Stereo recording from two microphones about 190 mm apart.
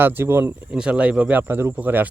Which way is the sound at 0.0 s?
10° right (ahead or behind).